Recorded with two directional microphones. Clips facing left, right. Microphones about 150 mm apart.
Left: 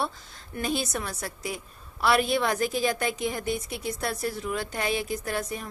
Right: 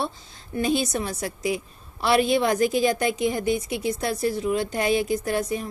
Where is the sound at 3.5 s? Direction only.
40° left (ahead or behind).